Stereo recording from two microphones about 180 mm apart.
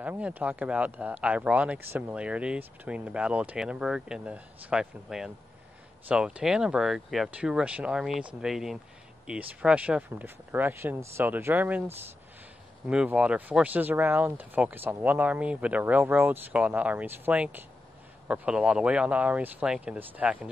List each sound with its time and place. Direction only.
0.0 s speech: 10° right (ahead or behind)
12.8 s speech: 5° right (ahead or behind)